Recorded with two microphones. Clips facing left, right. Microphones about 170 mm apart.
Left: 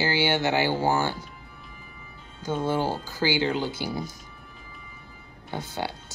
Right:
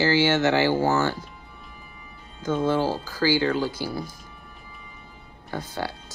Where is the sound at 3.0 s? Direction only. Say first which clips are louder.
Right 3 dB; 25° left (ahead or behind).